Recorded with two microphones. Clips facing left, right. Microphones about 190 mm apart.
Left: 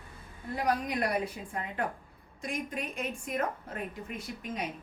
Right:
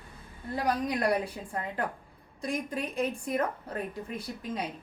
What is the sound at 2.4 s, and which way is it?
A woman's voice, 35° right (ahead or behind).